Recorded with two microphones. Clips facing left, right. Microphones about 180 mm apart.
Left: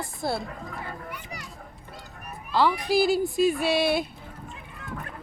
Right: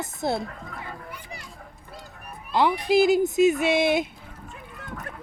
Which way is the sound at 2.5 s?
20° right (ahead or behind).